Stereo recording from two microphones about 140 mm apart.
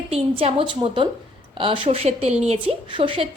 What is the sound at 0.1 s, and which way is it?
A woman's voice, 45° right (ahead or behind).